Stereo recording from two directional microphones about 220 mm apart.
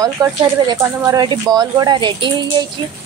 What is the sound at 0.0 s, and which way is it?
A woman's voice, 15° right (ahead or behind).